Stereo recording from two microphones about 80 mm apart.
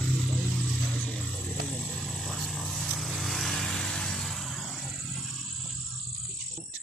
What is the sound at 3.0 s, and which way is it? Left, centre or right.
Vehicle, centre.